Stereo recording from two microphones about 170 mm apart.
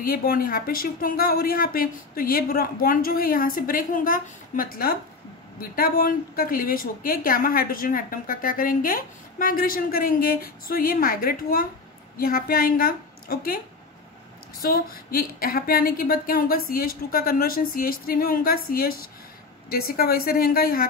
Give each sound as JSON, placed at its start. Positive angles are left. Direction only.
{"t": 0.0, "sound": "a woman's voice", "side_deg": 60}
{"t": 14.6, "sound": "a woman's voice", "side_deg": 60}